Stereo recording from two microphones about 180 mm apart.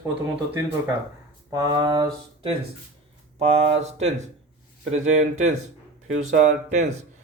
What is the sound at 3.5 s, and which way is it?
Speech, 35° right (ahead or behind).